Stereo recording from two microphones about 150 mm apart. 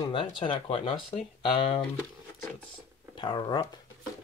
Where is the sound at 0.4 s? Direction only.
35° left (ahead or behind).